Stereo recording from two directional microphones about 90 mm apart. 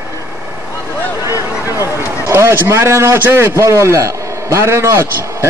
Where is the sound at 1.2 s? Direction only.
35° right (ahead or behind).